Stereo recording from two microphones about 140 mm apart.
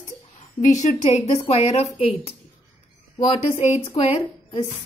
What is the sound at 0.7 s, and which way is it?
A woman's voice, 55° left (ahead or behind).